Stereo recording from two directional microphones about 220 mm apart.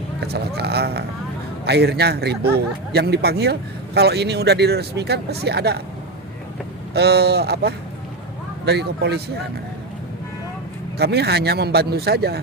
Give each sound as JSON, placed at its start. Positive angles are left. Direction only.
{"t": 0.3, "sound": "a man's voice", "side_deg": -45}
{"t": 6.9, "sound": "a man's voice", "side_deg": -45}
{"t": 10.9, "sound": "a man's voice", "side_deg": -45}